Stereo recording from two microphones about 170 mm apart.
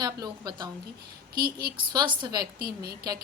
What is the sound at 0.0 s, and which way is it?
Speech, 25° right (ahead or behind).